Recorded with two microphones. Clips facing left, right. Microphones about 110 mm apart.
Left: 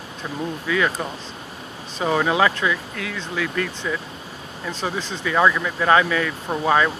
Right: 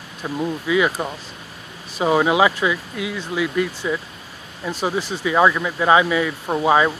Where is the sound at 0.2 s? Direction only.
15° right (ahead or behind).